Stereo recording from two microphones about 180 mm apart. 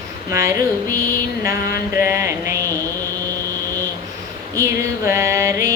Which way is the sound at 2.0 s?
15° right (ahead or behind).